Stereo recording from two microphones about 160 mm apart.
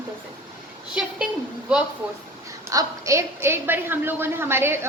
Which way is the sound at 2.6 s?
20° right (ahead or behind).